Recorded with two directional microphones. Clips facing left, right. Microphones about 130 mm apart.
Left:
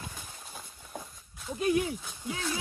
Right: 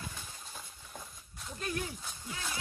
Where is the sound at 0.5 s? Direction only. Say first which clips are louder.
Left 5 dB; centre (ahead or behind).